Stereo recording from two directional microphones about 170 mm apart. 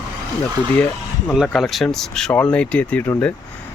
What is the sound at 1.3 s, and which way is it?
Speech, centre (ahead or behind).